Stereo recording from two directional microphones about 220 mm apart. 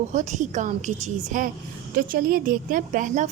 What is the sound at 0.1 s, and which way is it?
A woman's voice, 35° right (ahead or behind).